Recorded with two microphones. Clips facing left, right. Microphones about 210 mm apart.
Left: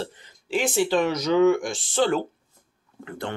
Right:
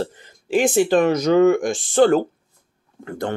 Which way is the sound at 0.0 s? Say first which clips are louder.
Right 6 dB; 50° right (ahead or behind).